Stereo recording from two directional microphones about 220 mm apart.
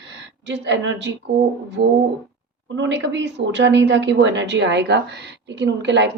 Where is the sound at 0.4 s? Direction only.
55° right (ahead or behind).